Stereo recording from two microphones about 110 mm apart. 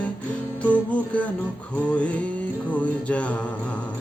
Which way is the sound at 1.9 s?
10° left (ahead or behind).